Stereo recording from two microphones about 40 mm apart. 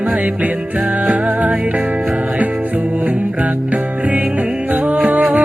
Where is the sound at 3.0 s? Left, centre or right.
Right.